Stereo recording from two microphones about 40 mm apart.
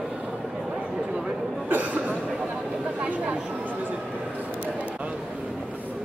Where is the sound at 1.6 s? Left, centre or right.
Right.